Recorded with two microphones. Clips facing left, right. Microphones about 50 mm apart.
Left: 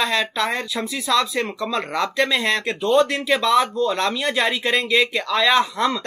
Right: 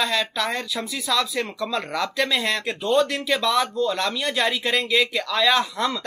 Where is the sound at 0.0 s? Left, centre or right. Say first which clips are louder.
Left 2 dB; centre.